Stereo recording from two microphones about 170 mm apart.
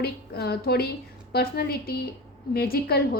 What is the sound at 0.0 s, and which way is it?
A woman's voice, 70° left (ahead or behind).